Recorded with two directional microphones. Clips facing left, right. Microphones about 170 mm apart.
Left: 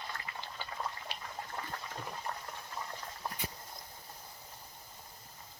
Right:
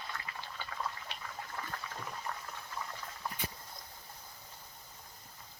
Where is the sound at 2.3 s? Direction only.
30° left (ahead or behind).